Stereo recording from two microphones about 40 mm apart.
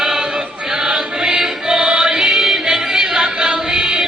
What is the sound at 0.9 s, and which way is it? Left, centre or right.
Music, centre.